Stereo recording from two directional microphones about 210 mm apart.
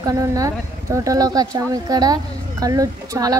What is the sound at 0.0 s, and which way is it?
A woman's voice, 15° right (ahead or behind).